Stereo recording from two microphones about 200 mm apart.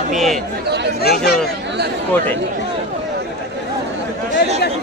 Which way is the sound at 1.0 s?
50° left (ahead or behind).